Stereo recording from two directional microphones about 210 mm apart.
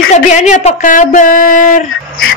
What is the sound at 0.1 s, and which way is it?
Speech, 35° left (ahead or behind).